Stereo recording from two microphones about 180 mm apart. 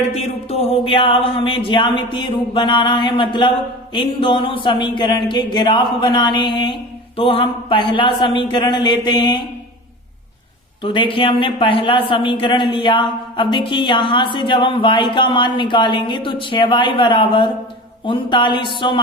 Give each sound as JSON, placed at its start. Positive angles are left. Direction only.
{"t": 0.1, "sound": "speech", "side_deg": 35}
{"t": 10.8, "sound": "speech", "side_deg": 30}